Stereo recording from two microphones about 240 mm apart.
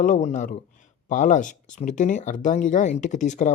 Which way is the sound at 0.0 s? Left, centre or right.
Left.